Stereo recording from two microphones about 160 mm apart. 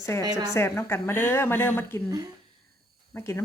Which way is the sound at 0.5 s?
15° left (ahead or behind).